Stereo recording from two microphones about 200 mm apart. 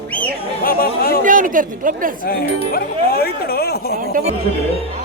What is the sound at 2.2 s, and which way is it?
Speech, 50° left (ahead or behind).